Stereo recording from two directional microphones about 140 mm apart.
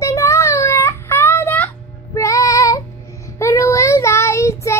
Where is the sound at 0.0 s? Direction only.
20° left (ahead or behind).